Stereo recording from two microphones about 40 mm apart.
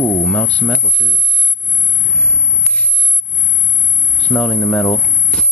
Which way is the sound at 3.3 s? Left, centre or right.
Left.